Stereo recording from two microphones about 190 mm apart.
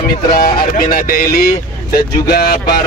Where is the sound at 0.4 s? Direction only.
50° left (ahead or behind).